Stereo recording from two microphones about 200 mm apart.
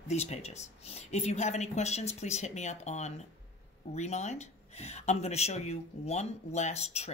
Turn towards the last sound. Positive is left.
turn(degrees=35)  # may be behind; listen again after turning